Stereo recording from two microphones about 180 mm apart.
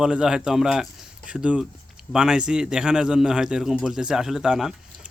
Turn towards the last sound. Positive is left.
turn(degrees=-5)  # may be behind; listen again after turning